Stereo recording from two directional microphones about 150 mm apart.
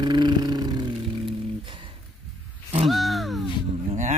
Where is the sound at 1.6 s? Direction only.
35° right (ahead or behind).